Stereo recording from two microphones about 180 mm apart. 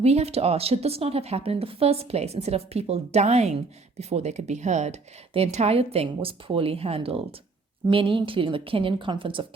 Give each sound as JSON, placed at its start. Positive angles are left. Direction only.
{"t": 0.0, "sound": "a woman's voice", "side_deg": -35}